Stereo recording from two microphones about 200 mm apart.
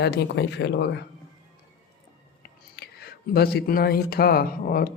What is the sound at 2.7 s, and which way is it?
Speech, 50° left (ahead or behind).